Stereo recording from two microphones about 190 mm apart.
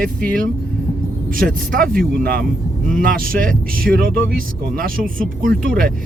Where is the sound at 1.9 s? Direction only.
50° right (ahead or behind).